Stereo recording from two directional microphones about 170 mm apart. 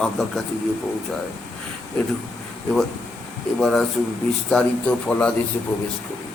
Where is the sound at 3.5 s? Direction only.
Centre (ahead or behind).